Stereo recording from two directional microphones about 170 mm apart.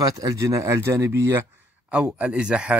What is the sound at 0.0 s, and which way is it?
A man's voice, 20° right (ahead or behind).